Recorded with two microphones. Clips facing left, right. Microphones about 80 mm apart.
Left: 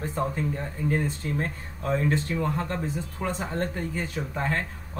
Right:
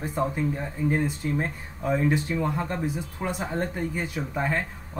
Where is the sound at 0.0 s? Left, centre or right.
Centre.